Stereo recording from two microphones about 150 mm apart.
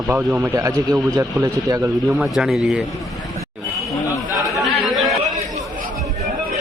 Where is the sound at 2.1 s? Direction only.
5° right (ahead or behind).